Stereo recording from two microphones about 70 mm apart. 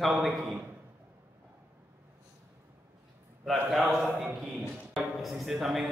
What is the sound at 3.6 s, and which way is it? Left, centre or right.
Speech, centre.